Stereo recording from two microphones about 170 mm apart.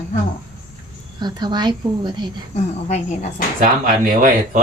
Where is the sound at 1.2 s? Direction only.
25° right (ahead or behind).